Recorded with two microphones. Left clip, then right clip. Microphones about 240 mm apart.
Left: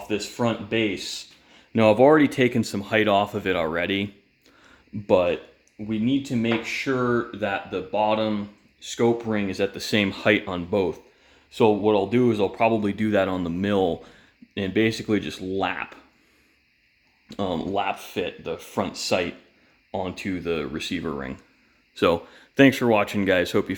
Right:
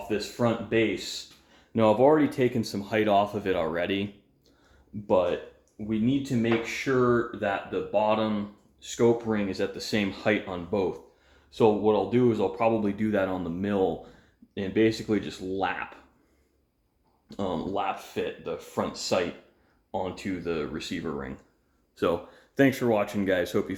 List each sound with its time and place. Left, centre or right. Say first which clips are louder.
0.1 s speech: left 2 dB; left
5.0 s speech: left 4 dB; left
6.4 s speech: left 2 dB; left
17.2 s speech: left 4 dB; left